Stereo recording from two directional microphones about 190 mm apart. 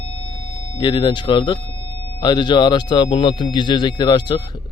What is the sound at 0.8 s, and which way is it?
Speech, 25° left (ahead or behind).